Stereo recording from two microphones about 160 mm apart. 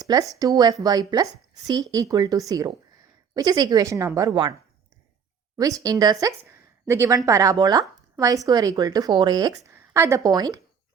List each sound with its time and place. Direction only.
0.0 s a woman's voice: 20° right (ahead or behind)
5.5 s a woman's voice: 20° right (ahead or behind)